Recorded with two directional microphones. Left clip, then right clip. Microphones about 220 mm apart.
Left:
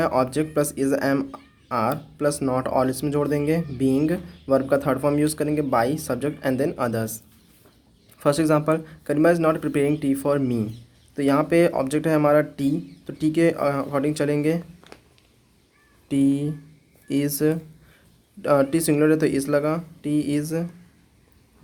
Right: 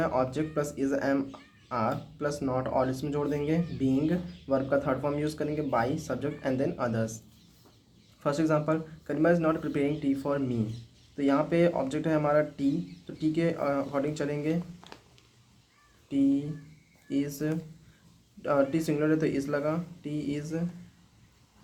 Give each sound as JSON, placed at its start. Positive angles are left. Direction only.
{"t": 0.0, "sound": "speech", "side_deg": 45}
{"t": 8.2, "sound": "speech", "side_deg": 50}
{"t": 14.9, "sound": "a sound", "side_deg": 5}
{"t": 16.0, "sound": "speech", "side_deg": 50}